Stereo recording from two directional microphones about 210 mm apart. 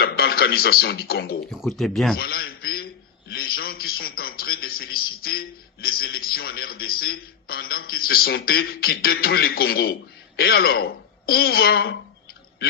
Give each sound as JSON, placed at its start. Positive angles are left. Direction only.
{"t": 0.0, "sound": "speech", "side_deg": 45}
{"t": 1.5, "sound": "speech", "side_deg": 0}
{"t": 2.1, "sound": "a man's voice", "side_deg": 45}